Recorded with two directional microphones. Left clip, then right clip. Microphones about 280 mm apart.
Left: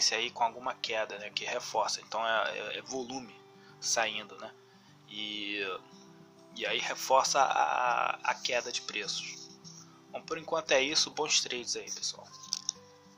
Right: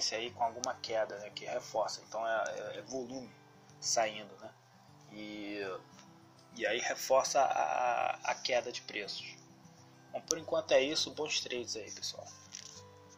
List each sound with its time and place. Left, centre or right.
0.0 s speech: centre
5.3 s speech: left
6.5 s speech: centre
11.6 s speech: left